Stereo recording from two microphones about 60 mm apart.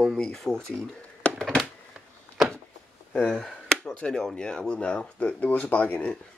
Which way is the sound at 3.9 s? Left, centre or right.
Centre.